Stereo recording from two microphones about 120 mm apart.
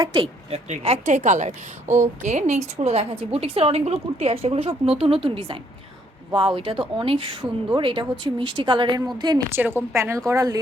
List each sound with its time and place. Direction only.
0.0 s speech: 45° right (ahead or behind)
0.7 s a woman's voice: 70° right (ahead or behind); by 9.0 s 40° right (ahead or behind)
9.5 s a woman's voice: 20° right (ahead or behind)